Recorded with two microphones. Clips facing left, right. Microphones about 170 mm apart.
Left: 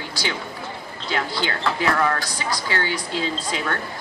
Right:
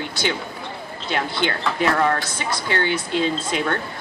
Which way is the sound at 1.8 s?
25° right (ahead or behind).